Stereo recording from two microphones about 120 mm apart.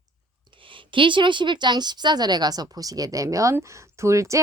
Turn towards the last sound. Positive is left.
turn(degrees=-25)  # may be behind; listen again after turning